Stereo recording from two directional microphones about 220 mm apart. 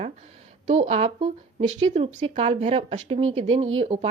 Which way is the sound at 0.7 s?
30° right (ahead or behind).